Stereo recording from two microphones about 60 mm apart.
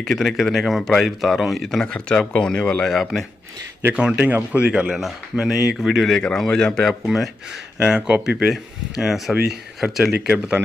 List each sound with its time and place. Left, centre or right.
0.0 s speech: centre
2.9 s speech: centre
3.9 s speech: centre
5.9 s speech: centre
6.3 s speech: centre
7.8 s speech: centre
10.2 s speech: centre